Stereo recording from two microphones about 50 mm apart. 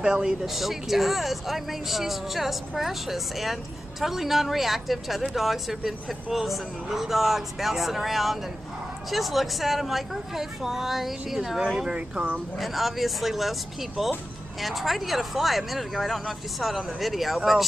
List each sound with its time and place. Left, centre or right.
0.0 s speech: centre
0.5 s speech: centre
11.9 s speech: right
12.5 s speech: centre